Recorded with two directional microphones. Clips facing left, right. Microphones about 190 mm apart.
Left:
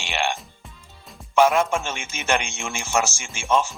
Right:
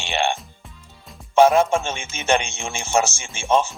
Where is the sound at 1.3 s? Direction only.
30° right (ahead or behind).